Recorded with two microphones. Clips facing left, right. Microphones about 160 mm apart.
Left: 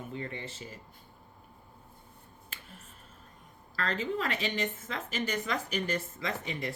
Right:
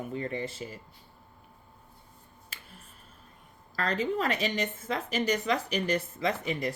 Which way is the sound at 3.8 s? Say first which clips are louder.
Right 3 dB; 40° right (ahead or behind).